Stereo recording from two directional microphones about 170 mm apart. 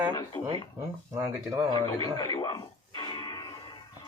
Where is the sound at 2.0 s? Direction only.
25° left (ahead or behind).